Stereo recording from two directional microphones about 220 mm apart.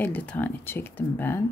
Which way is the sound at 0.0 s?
10° left (ahead or behind).